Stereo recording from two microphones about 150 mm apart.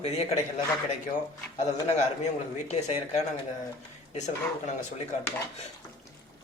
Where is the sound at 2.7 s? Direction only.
50° left (ahead or behind).